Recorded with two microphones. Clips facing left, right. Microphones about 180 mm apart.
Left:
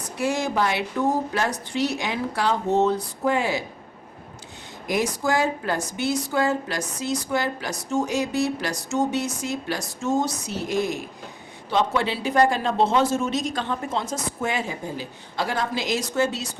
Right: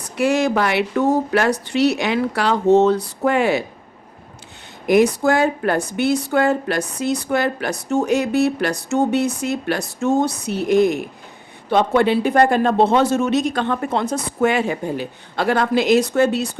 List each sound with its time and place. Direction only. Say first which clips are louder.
0.2 s a woman's voice: right 6 dB; 70° right (ahead or behind)
4.9 s a woman's voice: right 9 dB; 60° right (ahead or behind)